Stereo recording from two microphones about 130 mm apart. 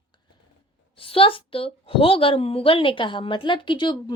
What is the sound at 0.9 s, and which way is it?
A woman's voice, 45° left (ahead or behind).